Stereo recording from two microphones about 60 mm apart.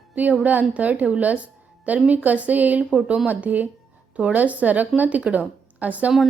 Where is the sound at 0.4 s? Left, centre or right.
Right.